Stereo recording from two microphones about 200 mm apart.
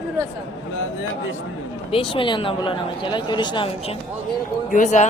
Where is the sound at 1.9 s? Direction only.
25° left (ahead or behind).